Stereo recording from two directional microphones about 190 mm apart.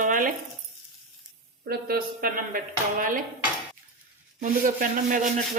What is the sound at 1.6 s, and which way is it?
Speech, 50° right (ahead or behind).